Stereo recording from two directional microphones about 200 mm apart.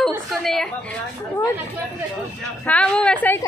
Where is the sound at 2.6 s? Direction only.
5° left (ahead or behind).